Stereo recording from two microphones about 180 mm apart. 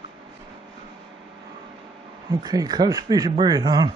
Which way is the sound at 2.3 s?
20° right (ahead or behind).